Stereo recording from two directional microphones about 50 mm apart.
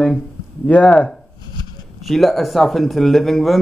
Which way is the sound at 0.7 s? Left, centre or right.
Left.